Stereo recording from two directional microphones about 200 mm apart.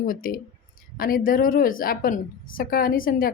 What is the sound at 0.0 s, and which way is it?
Speech, 45° left (ahead or behind).